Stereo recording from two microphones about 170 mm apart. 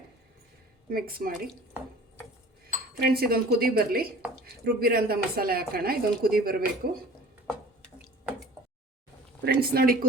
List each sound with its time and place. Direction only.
0.9 s speech: 60° right (ahead or behind)
3.0 s speech: 65° right (ahead or behind)
8.0 s drip: 5° right (ahead or behind)
9.4 s speech: 65° right (ahead or behind)